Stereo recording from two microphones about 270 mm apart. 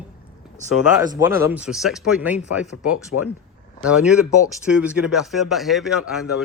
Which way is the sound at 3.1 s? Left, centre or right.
Left.